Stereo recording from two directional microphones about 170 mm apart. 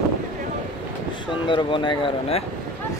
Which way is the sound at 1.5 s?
30° left (ahead or behind).